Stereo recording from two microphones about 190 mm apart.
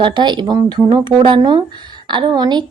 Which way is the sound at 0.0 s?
25° right (ahead or behind).